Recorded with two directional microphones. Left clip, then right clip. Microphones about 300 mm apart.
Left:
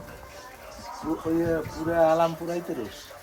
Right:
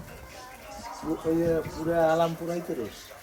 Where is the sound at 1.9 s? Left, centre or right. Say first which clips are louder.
Left 2 dB; centre.